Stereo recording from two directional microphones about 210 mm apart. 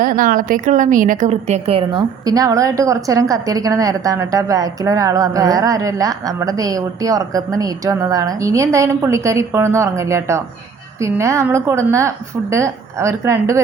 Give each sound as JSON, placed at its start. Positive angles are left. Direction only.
{"t": 0.0, "sound": "a woman's voice", "side_deg": -40}